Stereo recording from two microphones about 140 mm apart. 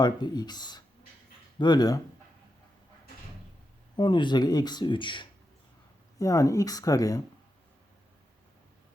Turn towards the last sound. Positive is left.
turn(degrees=25)  # may be behind; listen again after turning